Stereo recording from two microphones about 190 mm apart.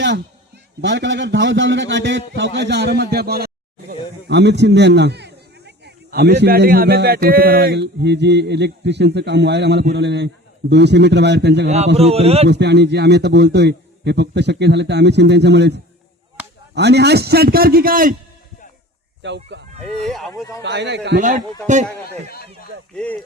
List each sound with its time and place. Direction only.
0.8 s a man's voice: 65° right (ahead or behind)
11.9 s a man's voice: 30° right (ahead or behind)
12.5 s a man's voice: 65° right (ahead or behind)
16.4 s chop: 5° right (ahead or behind)
16.7 s a man's voice: 60° right (ahead or behind)
19.2 s a man's voice: 70° right (ahead or behind)
20.0 s speech: centre (ahead or behind)
20.6 s a man's voice: 65° right (ahead or behind)
21.2 s a man's voice: 40° right (ahead or behind)
22.0 s speech: 55° left (ahead or behind)